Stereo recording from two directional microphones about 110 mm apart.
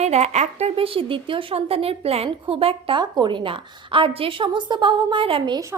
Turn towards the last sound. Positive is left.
turn(degrees=-50)  # may be behind; listen again after turning